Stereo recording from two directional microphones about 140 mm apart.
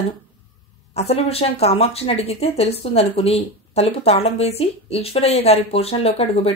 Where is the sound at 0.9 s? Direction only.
45° left (ahead or behind).